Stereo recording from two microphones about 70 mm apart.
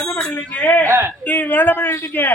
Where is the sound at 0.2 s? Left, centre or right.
Left.